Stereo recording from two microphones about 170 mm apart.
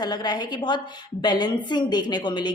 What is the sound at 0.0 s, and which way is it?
A woman's voice, 25° left (ahead or behind).